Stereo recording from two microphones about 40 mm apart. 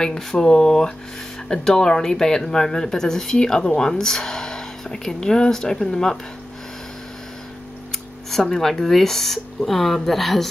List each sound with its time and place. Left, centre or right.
0.0 s speech: centre
8.5 s a woman's voice: centre